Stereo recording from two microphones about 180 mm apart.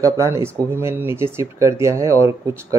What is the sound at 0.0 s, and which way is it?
Speech, 15° right (ahead or behind).